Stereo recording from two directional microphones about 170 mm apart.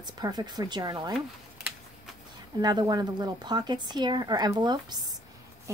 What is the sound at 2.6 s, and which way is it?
A woman's voice, 25° right (ahead or behind).